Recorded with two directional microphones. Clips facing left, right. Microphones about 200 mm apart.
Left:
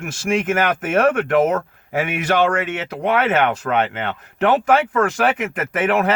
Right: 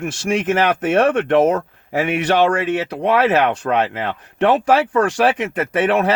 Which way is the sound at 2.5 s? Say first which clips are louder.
Right 3 dB; 35° right (ahead or behind).